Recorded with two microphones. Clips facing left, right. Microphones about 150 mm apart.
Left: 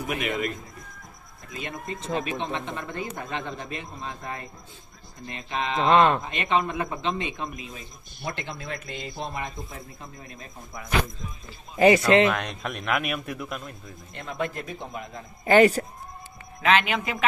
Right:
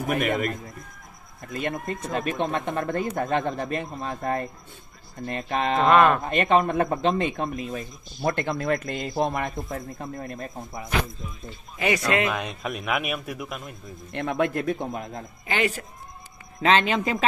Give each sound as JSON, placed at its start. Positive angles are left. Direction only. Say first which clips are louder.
{"t": 0.1, "sound": "speech", "louder": "right 4 dB", "side_deg": -50}
{"t": 1.5, "sound": "speech", "louder": "right 6 dB", "side_deg": -55}
{"t": 5.9, "sound": "speech", "louder": "right 1 dB", "side_deg": 25}
{"t": 6.2, "sound": "speech", "louder": "right 5 dB", "side_deg": -50}
{"t": 11.8, "sound": "speech", "louder": "left 6 dB", "side_deg": 30}
{"t": 12.3, "sound": "a man's voice", "louder": "even", "side_deg": -5}
{"t": 14.1, "sound": "speech", "louder": "right 7 dB", "side_deg": -65}
{"t": 15.4, "sound": "a man's voice", "louder": "left 9 dB", "side_deg": 40}
{"t": 16.6, "sound": "speech", "louder": "right 2 dB", "side_deg": -35}